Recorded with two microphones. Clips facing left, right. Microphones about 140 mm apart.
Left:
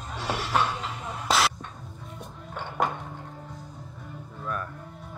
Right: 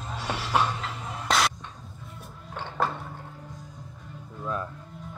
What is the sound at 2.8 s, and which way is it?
Music, 15° left (ahead or behind).